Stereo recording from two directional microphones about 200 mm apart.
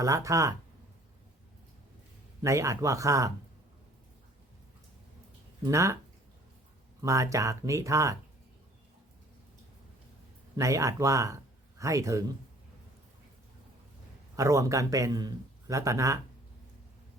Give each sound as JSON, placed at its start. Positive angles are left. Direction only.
{"t": 0.0, "sound": "a man's voice", "side_deg": -15}
{"t": 2.4, "sound": "a man's voice", "side_deg": -15}
{"t": 5.6, "sound": "a man's voice", "side_deg": -15}
{"t": 7.0, "sound": "a man's voice", "side_deg": -15}
{"t": 10.6, "sound": "a man's voice", "side_deg": -15}
{"t": 14.3, "sound": "a man's voice", "side_deg": -15}